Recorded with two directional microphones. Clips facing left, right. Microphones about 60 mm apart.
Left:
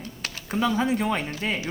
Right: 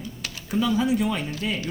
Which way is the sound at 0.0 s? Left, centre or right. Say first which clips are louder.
Even; left.